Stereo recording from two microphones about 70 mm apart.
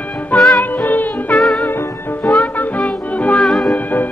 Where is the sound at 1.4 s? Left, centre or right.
Centre.